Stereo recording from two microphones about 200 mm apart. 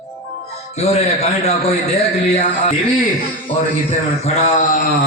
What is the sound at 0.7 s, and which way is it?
A man's voice, 35° left (ahead or behind).